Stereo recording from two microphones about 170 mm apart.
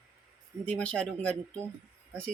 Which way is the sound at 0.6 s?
5° left (ahead or behind).